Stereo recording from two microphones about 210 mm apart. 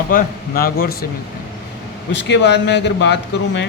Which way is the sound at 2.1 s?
55° left (ahead or behind).